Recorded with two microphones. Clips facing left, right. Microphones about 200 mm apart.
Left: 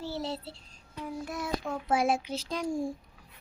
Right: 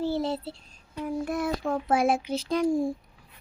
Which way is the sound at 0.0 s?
55° right (ahead or behind).